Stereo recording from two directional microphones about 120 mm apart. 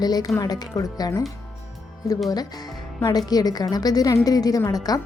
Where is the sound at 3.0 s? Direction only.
35° left (ahead or behind).